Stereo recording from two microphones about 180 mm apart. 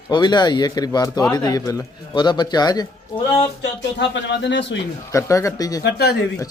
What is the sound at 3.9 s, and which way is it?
Speech, 80° left.